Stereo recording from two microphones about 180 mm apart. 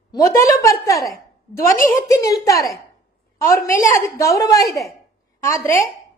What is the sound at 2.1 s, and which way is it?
A woman's voice, 20° left (ahead or behind).